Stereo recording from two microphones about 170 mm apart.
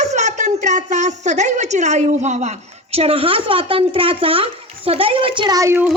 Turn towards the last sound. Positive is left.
turn(degrees=-15)  # may be behind; listen again after turning